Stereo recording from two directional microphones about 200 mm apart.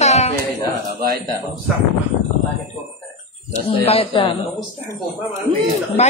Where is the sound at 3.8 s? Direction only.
30° left (ahead or behind).